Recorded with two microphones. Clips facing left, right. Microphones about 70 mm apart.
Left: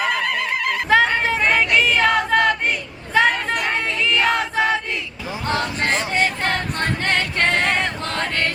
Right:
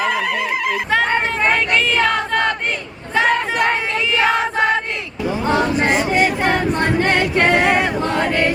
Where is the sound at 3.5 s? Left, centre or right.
Right.